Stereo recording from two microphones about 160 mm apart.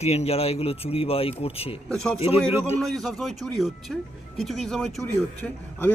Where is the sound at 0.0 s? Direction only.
40° left (ahead or behind).